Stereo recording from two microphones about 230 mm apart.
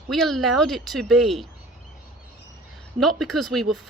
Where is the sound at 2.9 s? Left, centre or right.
Centre.